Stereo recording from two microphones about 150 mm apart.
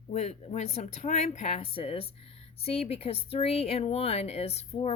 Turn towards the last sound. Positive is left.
turn(degrees=45)  # may be behind; listen again after turning